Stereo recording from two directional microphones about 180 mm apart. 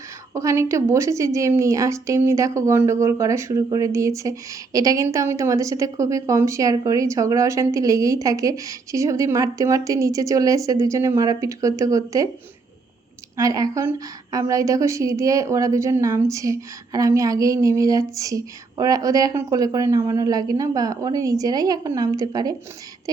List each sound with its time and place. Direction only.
0.3 s a woman's voice: 15° right (ahead or behind)
13.3 s a woman's voice: 20° right (ahead or behind)